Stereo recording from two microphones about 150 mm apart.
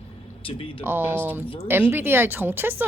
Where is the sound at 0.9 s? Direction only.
15° right (ahead or behind).